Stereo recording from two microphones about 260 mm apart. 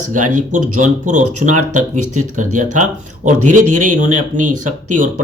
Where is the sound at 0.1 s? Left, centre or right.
Right.